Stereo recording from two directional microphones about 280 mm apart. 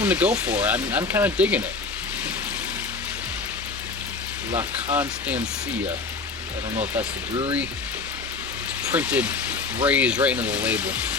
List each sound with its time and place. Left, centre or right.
0.0 s speech: centre
4.5 s speech: centre
6.9 s speech: centre
8.9 s speech: centre